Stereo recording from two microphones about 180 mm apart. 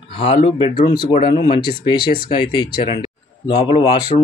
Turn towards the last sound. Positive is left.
turn(degrees=20)  # may be behind; listen again after turning